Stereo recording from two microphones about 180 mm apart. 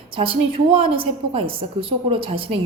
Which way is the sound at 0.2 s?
30° right (ahead or behind).